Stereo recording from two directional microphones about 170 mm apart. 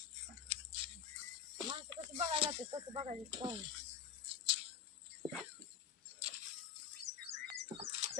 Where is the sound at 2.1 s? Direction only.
35° right (ahead or behind).